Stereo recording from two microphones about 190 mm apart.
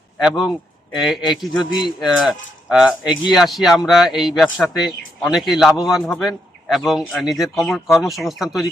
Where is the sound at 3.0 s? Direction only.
20° left (ahead or behind).